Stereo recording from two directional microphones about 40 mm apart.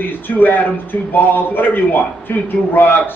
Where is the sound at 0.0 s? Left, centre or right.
Left.